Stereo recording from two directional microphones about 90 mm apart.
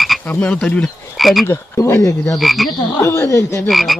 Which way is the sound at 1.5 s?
30° left (ahead or behind).